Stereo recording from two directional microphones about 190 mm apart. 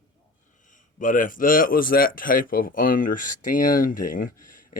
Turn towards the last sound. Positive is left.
turn(degrees=45)  # may be behind; listen again after turning